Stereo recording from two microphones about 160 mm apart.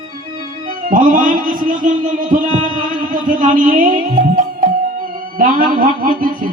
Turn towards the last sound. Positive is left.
turn(degrees=-60)  # may be behind; listen again after turning